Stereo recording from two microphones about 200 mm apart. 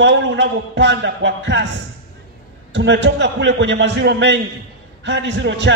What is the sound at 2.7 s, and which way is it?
A man's voice, 60° right (ahead or behind).